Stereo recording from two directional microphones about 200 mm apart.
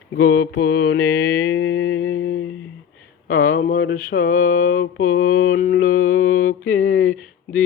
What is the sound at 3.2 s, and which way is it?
Mantra, 45° left (ahead or behind).